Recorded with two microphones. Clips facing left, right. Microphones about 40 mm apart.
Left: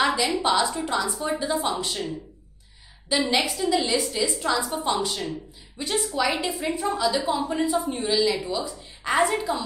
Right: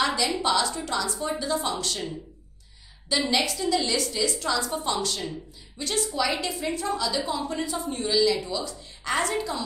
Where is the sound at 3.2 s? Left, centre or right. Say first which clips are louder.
Even; centre.